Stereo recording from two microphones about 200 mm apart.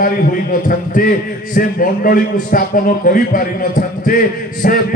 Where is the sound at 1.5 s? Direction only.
45° left (ahead or behind).